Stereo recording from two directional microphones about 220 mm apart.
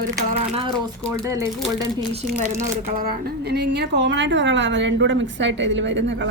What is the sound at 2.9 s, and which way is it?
A woman's voice, 40° right (ahead or behind).